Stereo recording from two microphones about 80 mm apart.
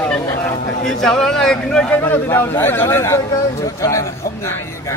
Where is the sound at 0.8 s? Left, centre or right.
Centre.